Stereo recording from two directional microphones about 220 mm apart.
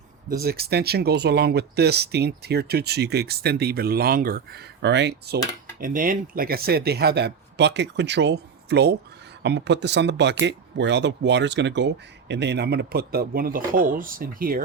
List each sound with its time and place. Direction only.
0.3 s speech: 45° right (ahead or behind)
5.8 s speech: 40° right (ahead or behind)